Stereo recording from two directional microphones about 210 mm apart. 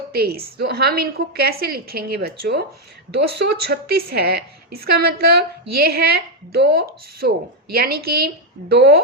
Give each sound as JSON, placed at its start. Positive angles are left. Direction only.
{"t": 0.1, "sound": "a woman's voice", "side_deg": -50}